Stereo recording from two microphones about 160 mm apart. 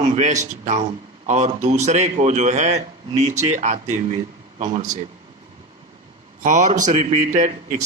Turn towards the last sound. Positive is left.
turn(degrees=-50)  # may be behind; listen again after turning